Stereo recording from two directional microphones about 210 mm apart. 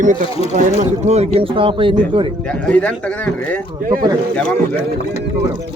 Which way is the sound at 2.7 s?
5° left (ahead or behind).